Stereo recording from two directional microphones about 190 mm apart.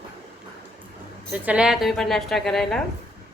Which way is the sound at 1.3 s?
5° right (ahead or behind).